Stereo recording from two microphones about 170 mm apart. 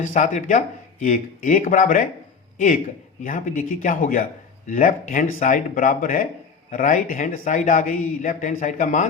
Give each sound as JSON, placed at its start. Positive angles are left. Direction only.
{"t": 0.0, "sound": "a man's voice", "side_deg": 45}